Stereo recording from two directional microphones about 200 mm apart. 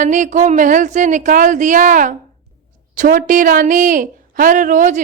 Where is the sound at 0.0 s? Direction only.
40° right (ahead or behind).